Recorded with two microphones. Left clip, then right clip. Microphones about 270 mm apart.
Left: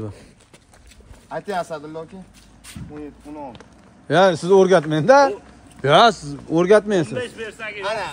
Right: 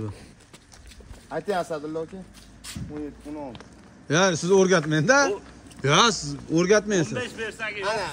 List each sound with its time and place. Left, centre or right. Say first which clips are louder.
1.6 s speech: left 1 dB; left
2.7 s a sound: right 1 dB; centre
4.1 s a man's voice: left 6 dB; centre
7.2 s a man's voice: left 2 dB; centre
7.8 s speech: left 3 dB; left